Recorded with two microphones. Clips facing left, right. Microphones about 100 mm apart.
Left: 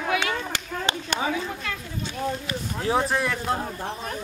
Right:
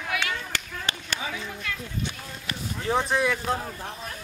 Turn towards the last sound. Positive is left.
turn(degrees=0)  # may be behind; listen again after turning